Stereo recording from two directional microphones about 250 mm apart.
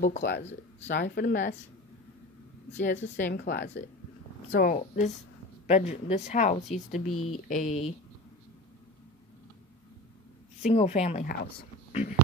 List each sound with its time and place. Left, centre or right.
0.4 s speech: left
0.9 s speech: left
2.7 s speech: left
3.3 s speech: left
7.1 s speech: left
7.4 s speech: left
10.6 s a woman's voice: left